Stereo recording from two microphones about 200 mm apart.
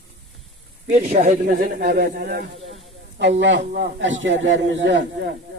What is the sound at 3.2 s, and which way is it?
A man's voice, 65° right (ahead or behind).